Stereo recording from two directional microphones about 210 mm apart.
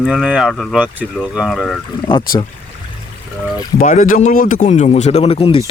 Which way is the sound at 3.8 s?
40° left (ahead or behind).